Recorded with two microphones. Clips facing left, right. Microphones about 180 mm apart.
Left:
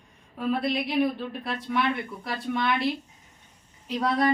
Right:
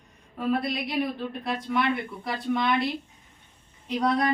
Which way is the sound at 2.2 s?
Centre (ahead or behind).